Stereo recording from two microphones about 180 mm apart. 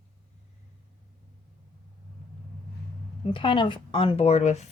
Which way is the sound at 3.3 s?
25° left (ahead or behind).